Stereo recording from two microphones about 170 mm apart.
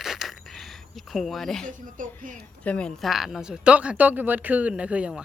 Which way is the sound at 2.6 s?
5° left (ahead or behind).